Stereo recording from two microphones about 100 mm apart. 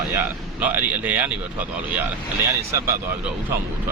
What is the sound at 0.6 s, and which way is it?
Speech, 15° right (ahead or behind).